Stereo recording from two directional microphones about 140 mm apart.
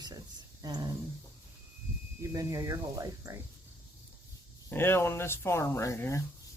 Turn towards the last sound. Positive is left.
turn(degrees=20)  # may be behind; listen again after turning